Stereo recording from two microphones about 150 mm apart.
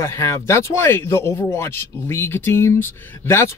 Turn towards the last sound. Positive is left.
turn(degrees=15)  # may be behind; listen again after turning